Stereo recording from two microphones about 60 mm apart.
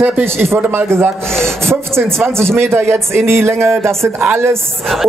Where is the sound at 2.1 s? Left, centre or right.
Right.